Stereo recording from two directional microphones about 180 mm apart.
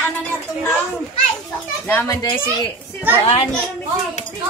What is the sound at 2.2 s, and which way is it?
Speech, 25° left (ahead or behind).